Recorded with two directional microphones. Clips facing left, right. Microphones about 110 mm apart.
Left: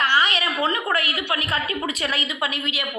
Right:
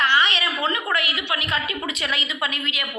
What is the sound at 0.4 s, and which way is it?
A woman's voice, 35° left (ahead or behind).